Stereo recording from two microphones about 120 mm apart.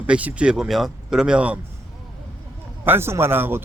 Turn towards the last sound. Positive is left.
turn(degrees=-20)  # may be behind; listen again after turning